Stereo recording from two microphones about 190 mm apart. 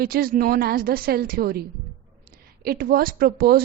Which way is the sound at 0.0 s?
50° right (ahead or behind).